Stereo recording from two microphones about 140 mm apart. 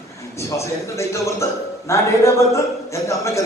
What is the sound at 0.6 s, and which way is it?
Speech, 20° left (ahead or behind).